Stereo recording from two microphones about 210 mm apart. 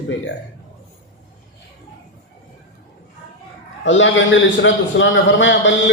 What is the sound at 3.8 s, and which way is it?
A man's voice, 60° left (ahead or behind).